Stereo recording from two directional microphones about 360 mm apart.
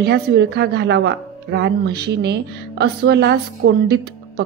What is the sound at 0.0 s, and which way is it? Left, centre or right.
A woman's voice, right.